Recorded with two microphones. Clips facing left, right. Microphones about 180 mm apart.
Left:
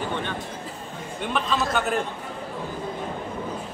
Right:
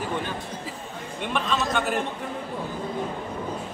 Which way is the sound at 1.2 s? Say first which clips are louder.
Left 1 dB; centre (ahead or behind).